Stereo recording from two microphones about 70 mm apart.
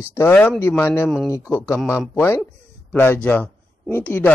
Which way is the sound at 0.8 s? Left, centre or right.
Left.